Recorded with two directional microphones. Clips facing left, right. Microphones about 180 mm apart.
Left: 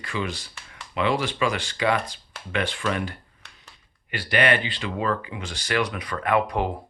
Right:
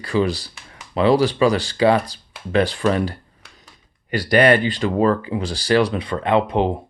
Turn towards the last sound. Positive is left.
turn(degrees=-25)  # may be behind; listen again after turning